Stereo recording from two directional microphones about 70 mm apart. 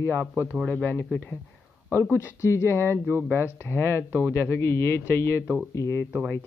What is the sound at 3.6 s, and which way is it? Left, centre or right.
Speech, left.